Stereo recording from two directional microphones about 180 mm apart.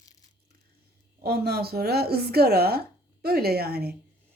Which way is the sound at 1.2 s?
60° right (ahead or behind).